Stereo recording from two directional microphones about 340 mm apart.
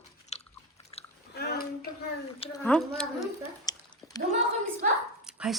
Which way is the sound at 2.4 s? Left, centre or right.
Centre.